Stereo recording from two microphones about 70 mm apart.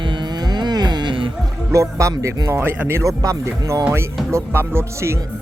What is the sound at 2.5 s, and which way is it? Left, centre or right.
Speech, right.